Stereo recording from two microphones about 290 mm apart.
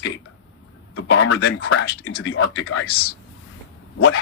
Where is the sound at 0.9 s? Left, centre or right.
Left.